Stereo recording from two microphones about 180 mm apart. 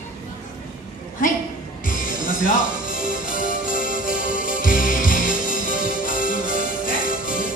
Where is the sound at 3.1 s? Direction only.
50° left (ahead or behind).